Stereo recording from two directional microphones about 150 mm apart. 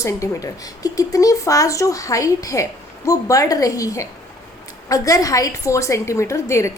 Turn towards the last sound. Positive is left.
turn(degrees=20)  # may be behind; listen again after turning